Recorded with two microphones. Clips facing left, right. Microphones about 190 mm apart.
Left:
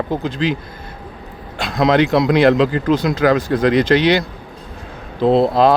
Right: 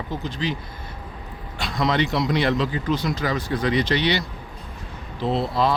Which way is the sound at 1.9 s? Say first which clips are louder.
Left 10 dB; 90° left.